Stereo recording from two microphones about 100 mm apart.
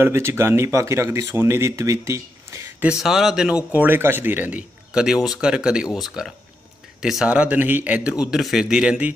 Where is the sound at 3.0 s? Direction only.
5° right (ahead or behind).